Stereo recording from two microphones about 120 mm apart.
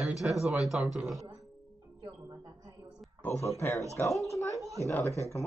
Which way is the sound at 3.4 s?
25° left (ahead or behind).